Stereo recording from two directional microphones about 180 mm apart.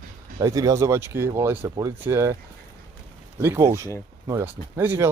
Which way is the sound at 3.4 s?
15° right (ahead or behind).